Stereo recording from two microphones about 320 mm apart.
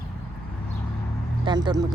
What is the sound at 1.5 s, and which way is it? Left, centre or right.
Speech, centre.